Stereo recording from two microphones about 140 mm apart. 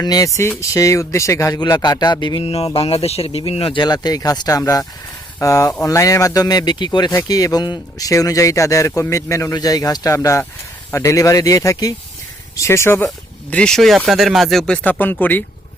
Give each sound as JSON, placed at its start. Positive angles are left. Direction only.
{"t": 0.0, "sound": "speech", "side_deg": 25}
{"t": 13.5, "sound": "speech", "side_deg": 5}